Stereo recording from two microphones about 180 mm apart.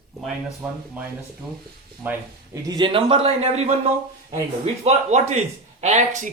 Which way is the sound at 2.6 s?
25° right (ahead or behind).